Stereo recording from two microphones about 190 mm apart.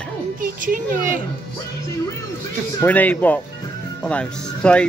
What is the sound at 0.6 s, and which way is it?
Speech, 45° right (ahead or behind).